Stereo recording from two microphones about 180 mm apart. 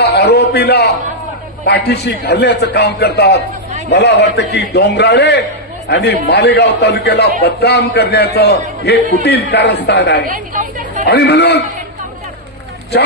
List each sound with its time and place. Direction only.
0.0 s a sound: 60° left (ahead or behind)
1.7 s a man's voice: 65° left (ahead or behind)
10.3 s chatter: 45° right (ahead or behind)
11.1 s a man's voice: 65° left (ahead or behind)